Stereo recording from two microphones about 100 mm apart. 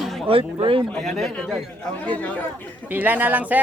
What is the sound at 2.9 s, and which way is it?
Speech, 20° right (ahead or behind).